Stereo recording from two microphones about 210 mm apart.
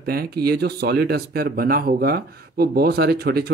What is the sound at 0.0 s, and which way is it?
Speech, 45° right (ahead or behind).